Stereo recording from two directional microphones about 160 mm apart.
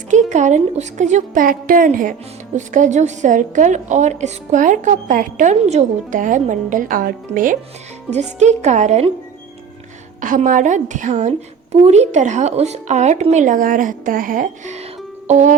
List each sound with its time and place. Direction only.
0.1 s a woman's voice: 50° right (ahead or behind)
8.1 s a woman's voice: 45° right (ahead or behind)
10.2 s a woman's voice: 55° right (ahead or behind)